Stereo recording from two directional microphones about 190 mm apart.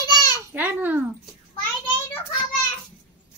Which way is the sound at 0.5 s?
10° right (ahead or behind).